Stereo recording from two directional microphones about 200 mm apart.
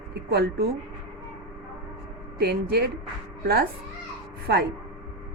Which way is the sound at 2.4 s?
55° right (ahead or behind).